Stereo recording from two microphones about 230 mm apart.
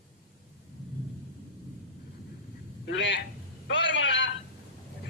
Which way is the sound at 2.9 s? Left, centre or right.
Left.